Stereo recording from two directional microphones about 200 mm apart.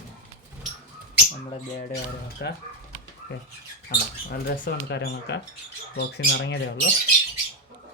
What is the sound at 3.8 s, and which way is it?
Speech, 45° left (ahead or behind).